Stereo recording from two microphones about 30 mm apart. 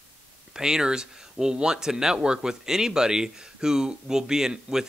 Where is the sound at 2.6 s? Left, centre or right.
Centre.